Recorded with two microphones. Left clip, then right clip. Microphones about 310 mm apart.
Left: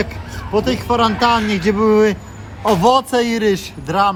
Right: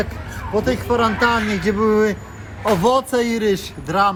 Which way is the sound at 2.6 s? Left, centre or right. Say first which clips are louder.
Left 3 dB; centre.